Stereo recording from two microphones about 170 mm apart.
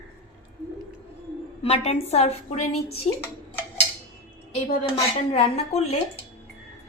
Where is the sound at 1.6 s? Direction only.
40° left (ahead or behind).